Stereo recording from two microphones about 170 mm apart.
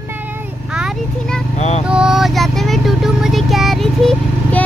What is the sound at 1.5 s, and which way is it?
Speech, 40° left (ahead or behind).